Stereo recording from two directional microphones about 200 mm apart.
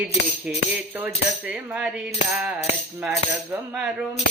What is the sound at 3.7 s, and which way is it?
Cutlery, 5° right (ahead or behind).